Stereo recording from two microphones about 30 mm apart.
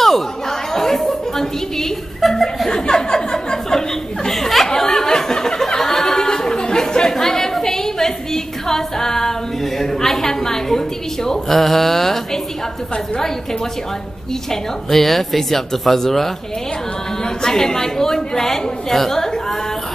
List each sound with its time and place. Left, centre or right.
0.0 s chatter: centre
2.2 s chuckle: centre
2.7 s chuckle: left
4.3 s a sound: centre
5.8 s chatter: centre
14.5 s speech: centre
17.2 s a woman's voice: centre